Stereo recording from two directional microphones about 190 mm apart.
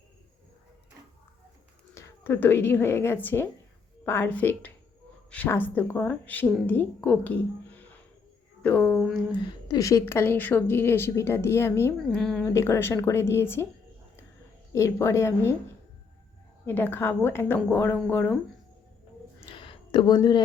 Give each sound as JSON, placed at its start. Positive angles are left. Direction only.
{"t": 2.0, "sound": "a woman's voice", "side_deg": 15}
{"t": 9.3, "sound": "a woman's voice", "side_deg": 20}
{"t": 12.1, "sound": "speech", "side_deg": 5}
{"t": 12.5, "sound": "a woman's voice", "side_deg": 15}
{"t": 14.7, "sound": "a woman's voice", "side_deg": 15}
{"t": 16.6, "sound": "a woman's voice", "side_deg": 10}
{"t": 19.5, "sound": "a sound", "side_deg": 25}